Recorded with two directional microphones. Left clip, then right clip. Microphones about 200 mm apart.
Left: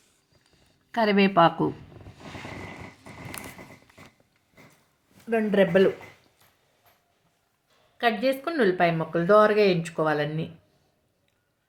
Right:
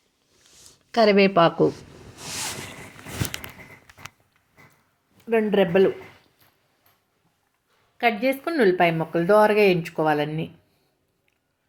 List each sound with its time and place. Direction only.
0.9 s speech: 30° right (ahead or behind)
5.3 s speech: 10° right (ahead or behind)
7.9 s speech: 10° right (ahead or behind)